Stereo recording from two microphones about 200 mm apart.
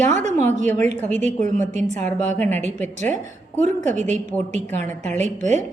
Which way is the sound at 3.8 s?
35° right (ahead or behind).